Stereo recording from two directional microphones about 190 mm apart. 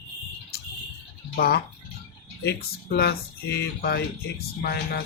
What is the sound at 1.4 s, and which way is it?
Speech, 55° left (ahead or behind).